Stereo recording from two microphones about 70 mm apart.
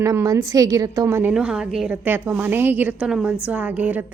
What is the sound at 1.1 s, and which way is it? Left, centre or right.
Speech, right.